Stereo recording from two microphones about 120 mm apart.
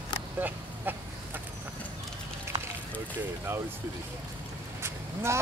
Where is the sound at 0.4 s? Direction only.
15° right (ahead or behind).